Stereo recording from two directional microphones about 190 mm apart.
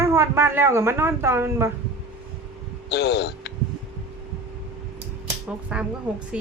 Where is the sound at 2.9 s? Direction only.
60° left (ahead or behind).